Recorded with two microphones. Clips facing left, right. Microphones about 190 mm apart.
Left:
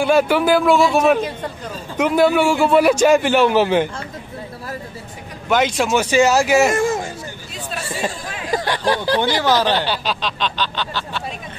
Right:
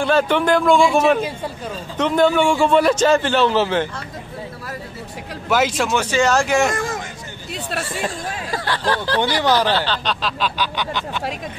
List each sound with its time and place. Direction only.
0.0 s a man's voice: 10° left (ahead or behind)
5.5 s a man's voice: 5° right (ahead or behind)
5.9 s a man's voice: 10° left (ahead or behind)
6.7 s a sound: 25° left (ahead or behind)
8.5 s a man's voice: 15° left (ahead or behind)
10.0 s speech: 5° right (ahead or behind)